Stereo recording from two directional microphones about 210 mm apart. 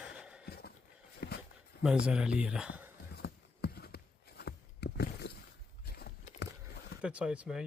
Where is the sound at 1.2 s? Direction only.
50° left (ahead or behind).